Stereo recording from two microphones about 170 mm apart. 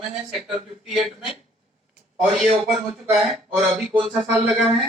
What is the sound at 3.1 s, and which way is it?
Speech, 5° right (ahead or behind).